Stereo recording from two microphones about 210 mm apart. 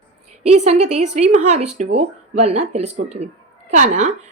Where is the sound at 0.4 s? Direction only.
30° right (ahead or behind).